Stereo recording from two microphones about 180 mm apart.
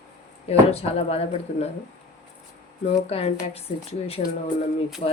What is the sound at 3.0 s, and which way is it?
Speech, 35° left (ahead or behind).